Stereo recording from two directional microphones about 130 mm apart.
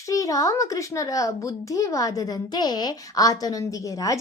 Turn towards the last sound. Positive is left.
turn(degrees=25)  # may be behind; listen again after turning